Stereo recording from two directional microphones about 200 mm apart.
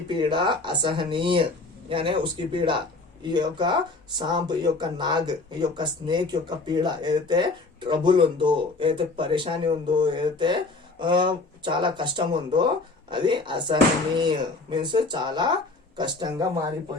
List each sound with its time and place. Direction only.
0.1 s speech: 25° right (ahead or behind)